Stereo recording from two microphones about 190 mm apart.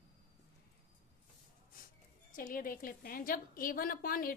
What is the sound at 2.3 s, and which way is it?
A woman's voice, 45° left (ahead or behind).